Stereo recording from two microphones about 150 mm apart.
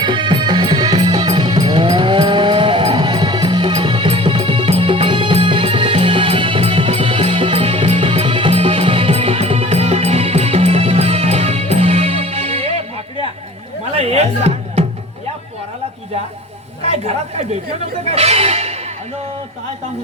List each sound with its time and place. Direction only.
0.0 s music: 35° right (ahead or behind)
13.9 s music: 45° right (ahead or behind)
16.8 s chatter: 45° right (ahead or behind)
18.0 s music: 45° right (ahead or behind)